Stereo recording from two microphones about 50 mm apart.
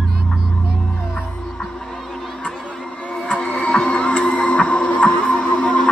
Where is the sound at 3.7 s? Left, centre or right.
Left.